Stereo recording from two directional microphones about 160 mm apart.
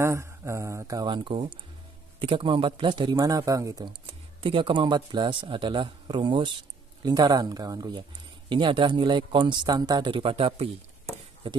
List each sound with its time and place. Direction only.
0.0 s a man's voice: 15° right (ahead or behind); by 10.7 s 35° right (ahead or behind)